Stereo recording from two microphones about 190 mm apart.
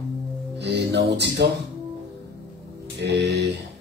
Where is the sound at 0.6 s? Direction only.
60° right (ahead or behind).